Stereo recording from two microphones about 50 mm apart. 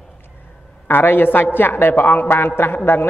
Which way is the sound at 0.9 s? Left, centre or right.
Left.